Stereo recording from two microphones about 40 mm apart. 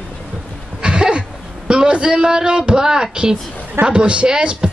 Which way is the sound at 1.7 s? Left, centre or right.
Right.